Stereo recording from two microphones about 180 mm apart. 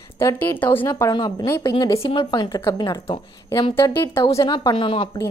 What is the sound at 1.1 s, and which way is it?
Speech, 20° left (ahead or behind).